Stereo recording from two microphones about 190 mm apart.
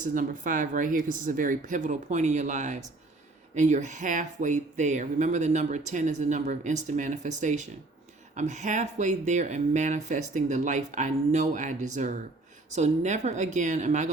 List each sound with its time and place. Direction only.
0.0 s speech: 45° right (ahead or behind)